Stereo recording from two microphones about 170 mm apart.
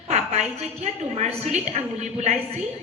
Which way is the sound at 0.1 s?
40° right (ahead or behind).